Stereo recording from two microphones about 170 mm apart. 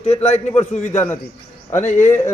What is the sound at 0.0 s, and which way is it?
Speech, 40° left (ahead or behind).